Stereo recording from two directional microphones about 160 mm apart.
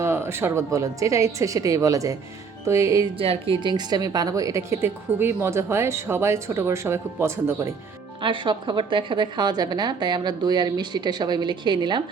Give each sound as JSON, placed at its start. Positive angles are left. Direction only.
{"t": 0.0, "sound": "a woman's voice", "side_deg": -15}
{"t": 3.2, "sound": "a woman's voice", "side_deg": -35}
{"t": 8.2, "sound": "a woman's voice", "side_deg": -30}